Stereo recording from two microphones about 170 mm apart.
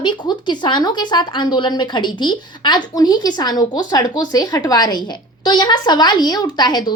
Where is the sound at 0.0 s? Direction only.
25° left (ahead or behind).